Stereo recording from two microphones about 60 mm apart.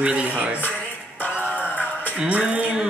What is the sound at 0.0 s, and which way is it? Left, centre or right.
Speech, right.